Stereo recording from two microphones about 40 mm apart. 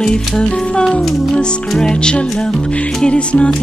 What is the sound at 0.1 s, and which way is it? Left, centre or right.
Music, left.